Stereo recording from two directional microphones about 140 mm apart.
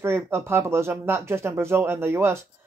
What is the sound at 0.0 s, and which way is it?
Speech, 20° right (ahead or behind).